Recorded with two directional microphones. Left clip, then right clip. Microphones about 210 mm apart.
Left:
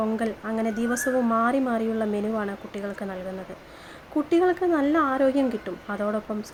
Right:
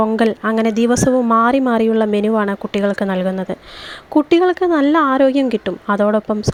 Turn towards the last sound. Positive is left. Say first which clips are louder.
# right 12 dB
turn(degrees=-35)  # may be behind; listen again after turning